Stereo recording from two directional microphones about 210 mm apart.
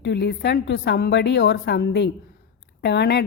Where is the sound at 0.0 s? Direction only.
55° left (ahead or behind).